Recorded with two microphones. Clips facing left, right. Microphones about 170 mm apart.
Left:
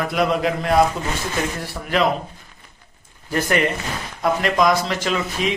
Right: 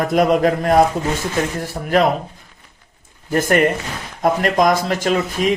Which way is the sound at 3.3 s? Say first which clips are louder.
Right 5 dB; 45° right (ahead or behind).